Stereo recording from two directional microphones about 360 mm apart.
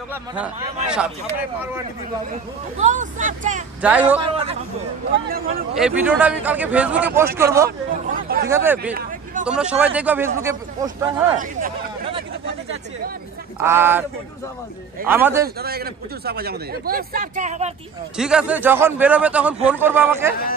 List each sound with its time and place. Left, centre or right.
0.1 s a man's voice: centre
2.8 s speech: centre
3.8 s a man's voice: centre
5.8 s a man's voice: centre
8.1 s hubbub: right
8.5 s a man's voice: centre
11.3 s hubbub: centre
13.6 s a man's voice: centre
15.0 s a man's voice: centre
15.4 s speech: right
18.1 s a man's voice: centre